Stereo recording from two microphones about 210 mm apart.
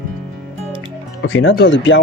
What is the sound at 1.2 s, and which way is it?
Speech, 65° left (ahead or behind).